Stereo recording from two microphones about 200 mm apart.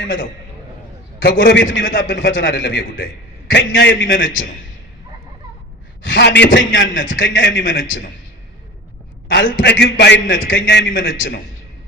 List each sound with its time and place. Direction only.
0.0 s a man's voice: 70° left (ahead or behind)
1.2 s a man's voice: 60° left (ahead or behind)
6.1 s a man's voice: 60° left (ahead or behind)
9.3 s a man's voice: 60° left (ahead or behind)